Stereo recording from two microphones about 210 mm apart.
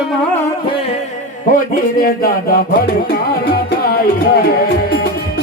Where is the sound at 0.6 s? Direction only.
25° left (ahead or behind).